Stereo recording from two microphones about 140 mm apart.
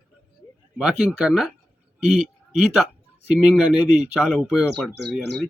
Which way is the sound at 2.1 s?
Centre (ahead or behind).